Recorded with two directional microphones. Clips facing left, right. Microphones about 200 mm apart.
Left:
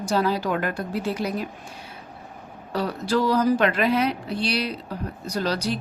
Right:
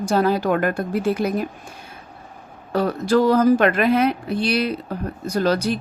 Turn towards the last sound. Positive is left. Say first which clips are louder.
# right 6 dB
turn(degrees=-50)  # may be behind; listen again after turning